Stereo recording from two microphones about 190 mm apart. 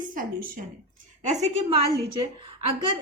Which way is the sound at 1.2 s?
35° right (ahead or behind).